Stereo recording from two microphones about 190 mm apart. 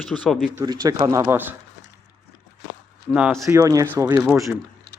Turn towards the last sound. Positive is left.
turn(degrees=-15)  # may be behind; listen again after turning